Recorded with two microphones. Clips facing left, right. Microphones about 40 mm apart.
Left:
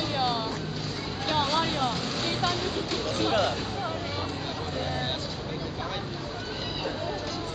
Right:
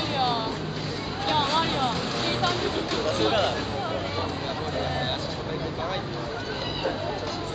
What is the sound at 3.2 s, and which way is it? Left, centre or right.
Music, right.